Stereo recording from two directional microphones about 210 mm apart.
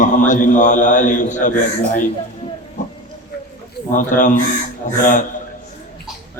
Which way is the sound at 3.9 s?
35° left (ahead or behind).